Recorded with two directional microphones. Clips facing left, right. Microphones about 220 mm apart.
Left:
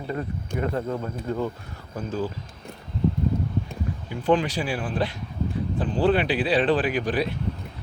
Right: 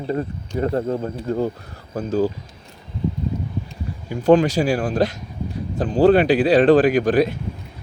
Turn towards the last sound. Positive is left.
turn(degrees=-45)  # may be behind; listen again after turning